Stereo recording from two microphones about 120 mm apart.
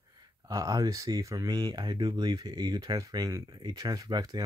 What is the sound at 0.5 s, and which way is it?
Speech, 30° right (ahead or behind).